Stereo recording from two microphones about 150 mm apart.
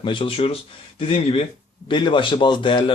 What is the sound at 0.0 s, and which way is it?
Speech, 35° left (ahead or behind).